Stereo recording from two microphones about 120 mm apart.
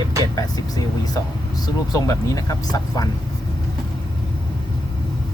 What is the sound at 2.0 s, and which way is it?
Speech, 25° left (ahead or behind).